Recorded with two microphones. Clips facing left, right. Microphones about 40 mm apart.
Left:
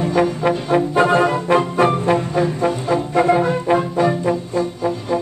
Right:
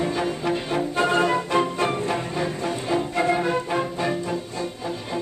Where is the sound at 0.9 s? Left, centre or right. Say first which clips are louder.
Left 4 dB; centre.